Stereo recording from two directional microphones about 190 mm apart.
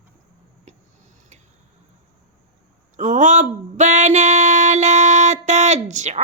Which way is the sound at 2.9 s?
40° right (ahead or behind).